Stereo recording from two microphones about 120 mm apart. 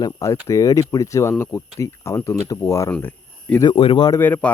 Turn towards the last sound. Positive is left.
turn(degrees=15)  # may be behind; listen again after turning